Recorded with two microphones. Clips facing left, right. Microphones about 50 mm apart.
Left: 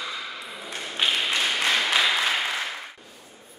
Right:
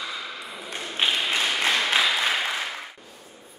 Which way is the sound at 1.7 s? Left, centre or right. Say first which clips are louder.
Even; centre.